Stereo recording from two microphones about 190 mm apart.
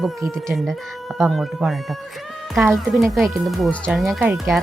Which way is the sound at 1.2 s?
Centre (ahead or behind).